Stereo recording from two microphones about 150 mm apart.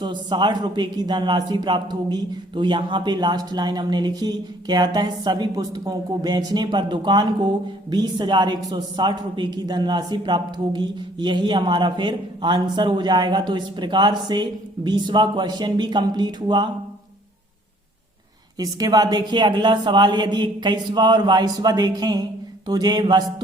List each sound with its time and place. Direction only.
0.0 s a man's voice: 30° right (ahead or behind)
18.6 s a man's voice: 25° right (ahead or behind)